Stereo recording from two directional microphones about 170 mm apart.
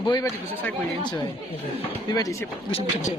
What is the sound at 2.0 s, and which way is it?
Speech, 20° left (ahead or behind).